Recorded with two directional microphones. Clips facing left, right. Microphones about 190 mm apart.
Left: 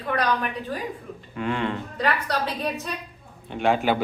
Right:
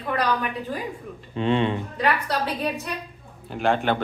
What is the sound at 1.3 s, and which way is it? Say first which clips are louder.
Speech: right 4 dB; 25° right (ahead or behind).